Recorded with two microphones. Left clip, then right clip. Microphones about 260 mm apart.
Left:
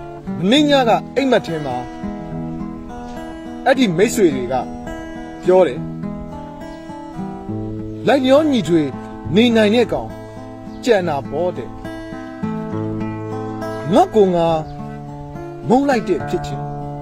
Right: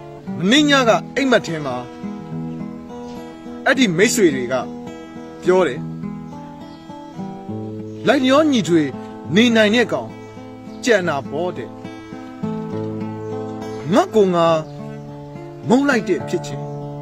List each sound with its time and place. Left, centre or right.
0.4 s speech: centre
3.6 s speech: centre
8.0 s speech: centre
12.7 s music: left
13.9 s speech: centre
15.8 s speech: centre